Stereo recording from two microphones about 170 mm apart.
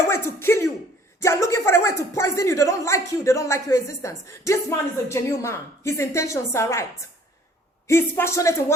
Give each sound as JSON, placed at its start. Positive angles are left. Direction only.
{"t": 0.1, "sound": "throat clearing", "side_deg": 15}
{"t": 1.2, "sound": "speech", "side_deg": 15}
{"t": 7.9, "sound": "speech", "side_deg": 15}